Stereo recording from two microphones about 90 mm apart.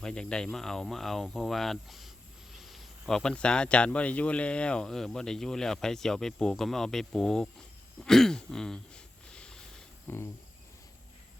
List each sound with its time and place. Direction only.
0.0 s speech: 10° left (ahead or behind)
8.0 s a sound: 5° left (ahead or behind)
10.1 s cricket: 20° left (ahead or behind)